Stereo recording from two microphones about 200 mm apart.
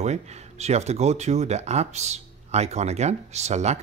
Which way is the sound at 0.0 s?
35° right (ahead or behind).